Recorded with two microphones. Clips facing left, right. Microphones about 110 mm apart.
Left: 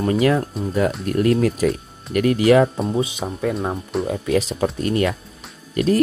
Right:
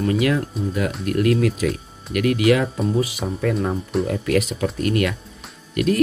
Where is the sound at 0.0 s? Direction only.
35° left (ahead or behind).